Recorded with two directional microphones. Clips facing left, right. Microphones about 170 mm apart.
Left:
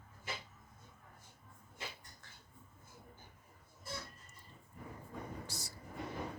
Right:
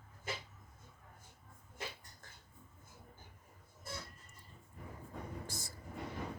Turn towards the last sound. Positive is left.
turn(degrees=-50)  # may be behind; listen again after turning